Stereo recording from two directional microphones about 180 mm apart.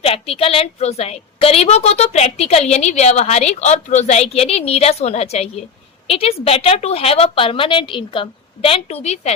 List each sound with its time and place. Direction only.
0.0 s a woman's voice: 30° left (ahead or behind)